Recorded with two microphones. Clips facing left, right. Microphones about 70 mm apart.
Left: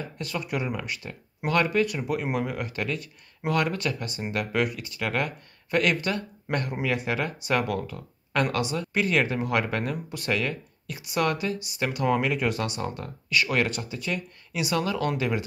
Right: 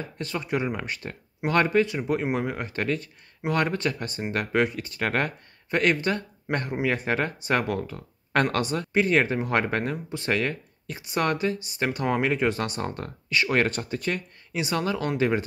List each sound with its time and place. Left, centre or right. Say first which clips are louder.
0.0 s speech: right 1 dB; right
7.0 s speech: right 2 dB; right